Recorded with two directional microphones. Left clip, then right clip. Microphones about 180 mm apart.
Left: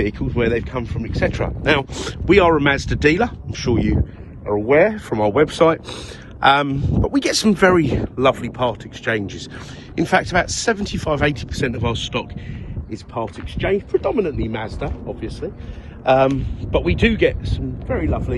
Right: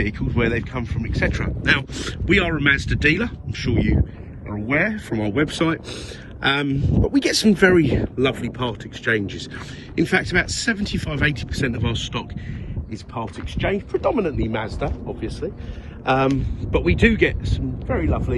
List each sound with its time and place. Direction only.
0.0 s speech: 10° left (ahead or behind)
4.8 s speech: 30° left (ahead or behind)
5.3 s speech: 15° left (ahead or behind)
6.4 s speech: 25° left (ahead or behind); by 15.5 s 5° left (ahead or behind)
16.0 s speech: 15° left (ahead or behind)
17.2 s speech: centre (ahead or behind)